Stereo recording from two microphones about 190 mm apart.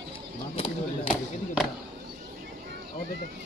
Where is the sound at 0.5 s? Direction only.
30° left (ahead or behind).